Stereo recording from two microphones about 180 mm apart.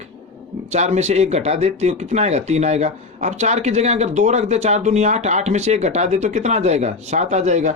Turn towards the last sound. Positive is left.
turn(degrees=-40)  # may be behind; listen again after turning